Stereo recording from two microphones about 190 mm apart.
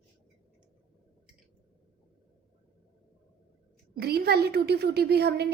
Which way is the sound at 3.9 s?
55° right (ahead or behind).